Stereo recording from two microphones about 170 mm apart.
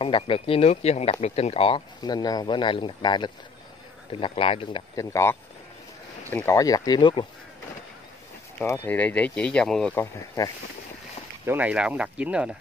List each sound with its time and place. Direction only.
0.0 s speech: 30° left (ahead or behind)
4.9 s speech: 15° left (ahead or behind)
8.5 s speech: 15° left (ahead or behind)
9.9 s speech: 20° left (ahead or behind)
11.4 s speech: 10° right (ahead or behind)